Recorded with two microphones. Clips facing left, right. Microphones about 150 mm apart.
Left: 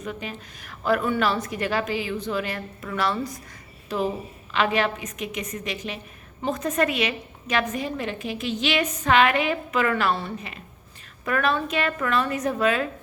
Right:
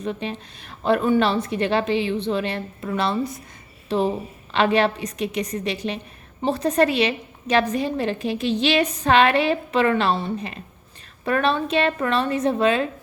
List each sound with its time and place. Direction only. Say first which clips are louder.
0.0 s a woman's voice: right 5 dB; 30° right (ahead or behind)